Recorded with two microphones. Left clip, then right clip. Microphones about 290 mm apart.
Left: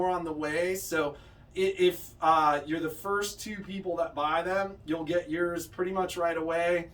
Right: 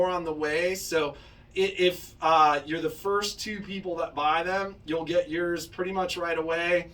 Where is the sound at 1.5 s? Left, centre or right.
Centre.